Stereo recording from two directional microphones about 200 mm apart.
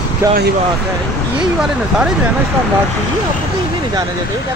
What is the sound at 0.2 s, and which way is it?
Speech, 15° right (ahead or behind).